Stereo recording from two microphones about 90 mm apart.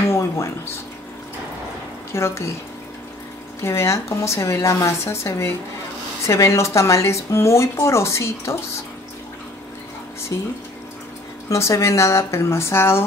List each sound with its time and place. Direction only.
0.0 s a sound: 30° left (ahead or behind)
2.1 s speech: 30° left (ahead or behind)
3.6 s speech: 35° left (ahead or behind)
10.3 s speech: 40° left (ahead or behind)